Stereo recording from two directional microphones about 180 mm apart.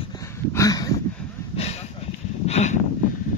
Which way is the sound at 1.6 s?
35° left (ahead or behind).